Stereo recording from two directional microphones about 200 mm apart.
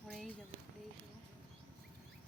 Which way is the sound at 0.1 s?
Centre (ahead or behind).